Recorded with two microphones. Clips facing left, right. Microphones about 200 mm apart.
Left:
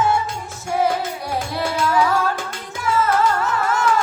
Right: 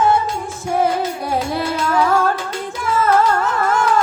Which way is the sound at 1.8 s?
55° right (ahead or behind).